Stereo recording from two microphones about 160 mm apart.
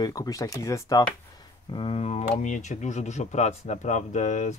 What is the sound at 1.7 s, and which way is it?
Speech, 30° left (ahead or behind).